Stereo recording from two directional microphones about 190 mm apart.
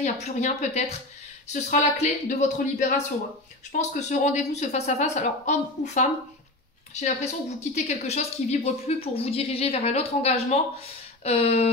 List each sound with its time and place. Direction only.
0.0 s a woman's voice: 35° left (ahead or behind)